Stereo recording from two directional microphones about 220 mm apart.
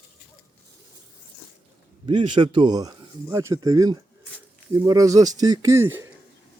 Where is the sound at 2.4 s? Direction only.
20° right (ahead or behind).